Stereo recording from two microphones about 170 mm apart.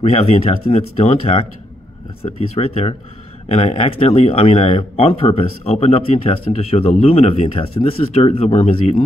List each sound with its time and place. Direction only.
0.0 s speech: 40° left (ahead or behind)